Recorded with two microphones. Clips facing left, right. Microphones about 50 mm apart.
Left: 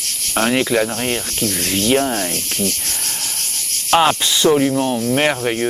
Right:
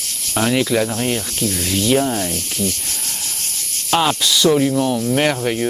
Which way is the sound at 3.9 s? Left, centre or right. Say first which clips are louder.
Left 2 dB; left.